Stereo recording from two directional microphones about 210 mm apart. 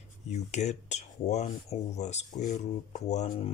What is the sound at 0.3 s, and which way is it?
Speech, 35° left (ahead or behind).